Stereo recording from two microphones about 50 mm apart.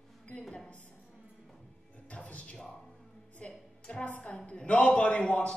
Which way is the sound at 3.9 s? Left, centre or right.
Left.